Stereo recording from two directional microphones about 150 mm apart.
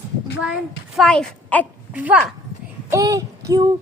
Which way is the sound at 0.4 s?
Centre (ahead or behind).